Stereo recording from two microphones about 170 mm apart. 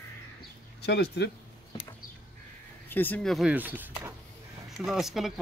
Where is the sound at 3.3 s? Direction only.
5° right (ahead or behind).